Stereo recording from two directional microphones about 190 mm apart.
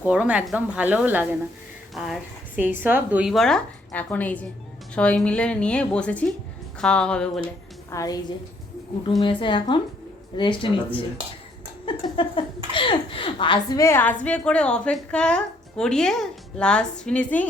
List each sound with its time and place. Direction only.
0.0 s a woman's voice: 5° right (ahead or behind)
7.9 s a woman's voice: 20° left (ahead or behind)
9.4 s a woman's voice: 25° left (ahead or behind); by 17.4 s 5° left (ahead or behind)